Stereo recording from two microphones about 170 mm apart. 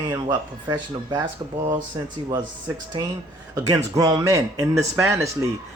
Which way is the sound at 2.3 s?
25° right (ahead or behind).